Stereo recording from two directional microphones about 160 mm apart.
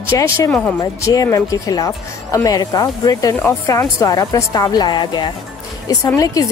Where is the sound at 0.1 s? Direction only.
20° left (ahead or behind).